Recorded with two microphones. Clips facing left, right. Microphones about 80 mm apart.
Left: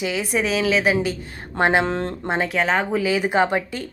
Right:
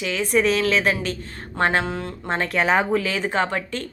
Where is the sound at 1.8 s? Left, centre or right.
Left.